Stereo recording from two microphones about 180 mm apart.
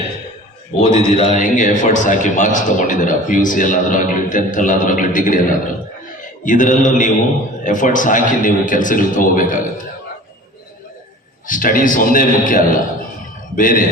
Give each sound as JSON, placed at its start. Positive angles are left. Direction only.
{"t": 0.9, "sound": "a man's voice", "side_deg": -35}
{"t": 1.3, "sound": "a man's voice", "side_deg": 45}
{"t": 11.4, "sound": "a man's voice", "side_deg": 50}